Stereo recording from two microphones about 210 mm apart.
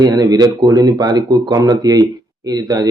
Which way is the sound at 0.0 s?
20° right (ahead or behind).